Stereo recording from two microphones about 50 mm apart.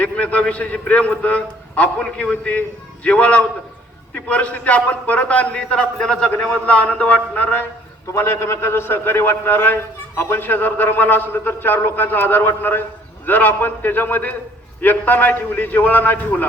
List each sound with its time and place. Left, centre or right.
0.0 s a man's voice: left
8.1 s a man's voice: left